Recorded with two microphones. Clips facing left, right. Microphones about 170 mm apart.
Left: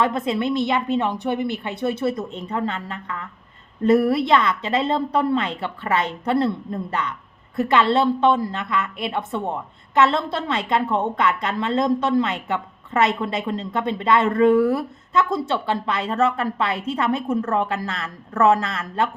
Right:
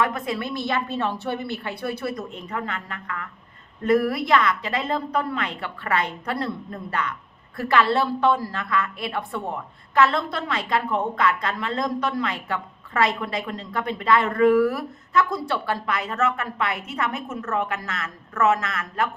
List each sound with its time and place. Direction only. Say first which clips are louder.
0.0 s a woman's voice: left 4 dB; 25° left (ahead or behind)